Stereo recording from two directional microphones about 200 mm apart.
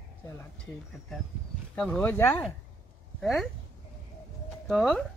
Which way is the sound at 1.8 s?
5° left (ahead or behind).